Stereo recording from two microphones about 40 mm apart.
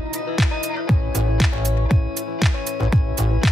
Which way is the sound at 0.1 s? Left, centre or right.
Centre.